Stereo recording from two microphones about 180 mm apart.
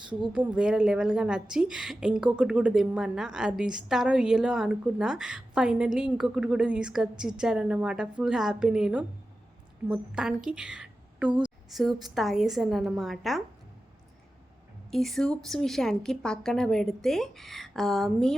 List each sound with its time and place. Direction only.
0.3 s a woman's voice: 5° right (ahead or behind)
14.8 s a woman's voice: centre (ahead or behind)